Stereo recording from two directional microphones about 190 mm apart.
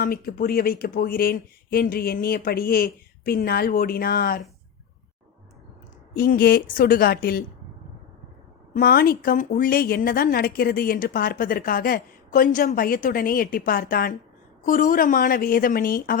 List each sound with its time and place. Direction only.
0.0 s a woman's voice: 50° left (ahead or behind)
6.1 s a woman's voice: 55° left (ahead or behind)
8.7 s a woman's voice: 55° left (ahead or behind)